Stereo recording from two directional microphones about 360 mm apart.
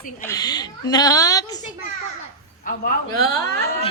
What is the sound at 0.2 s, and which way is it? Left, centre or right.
A woman's voice, centre.